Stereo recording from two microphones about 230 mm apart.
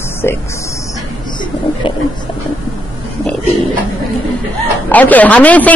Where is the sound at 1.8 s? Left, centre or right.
Left.